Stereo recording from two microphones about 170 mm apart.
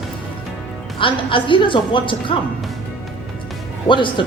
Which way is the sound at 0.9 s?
30° left (ahead or behind).